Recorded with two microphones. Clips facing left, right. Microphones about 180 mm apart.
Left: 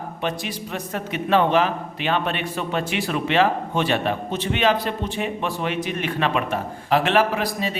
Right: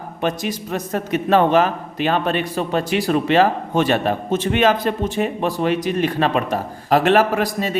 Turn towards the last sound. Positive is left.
turn(degrees=-45)  # may be behind; listen again after turning